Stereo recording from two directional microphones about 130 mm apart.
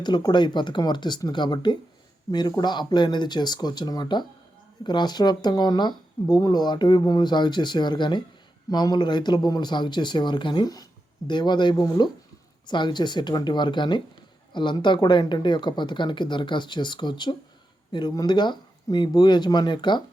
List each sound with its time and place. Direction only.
0.0 s speech: 35° left (ahead or behind)